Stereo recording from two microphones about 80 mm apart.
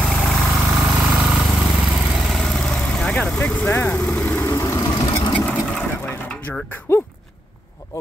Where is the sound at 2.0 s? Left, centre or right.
Centre.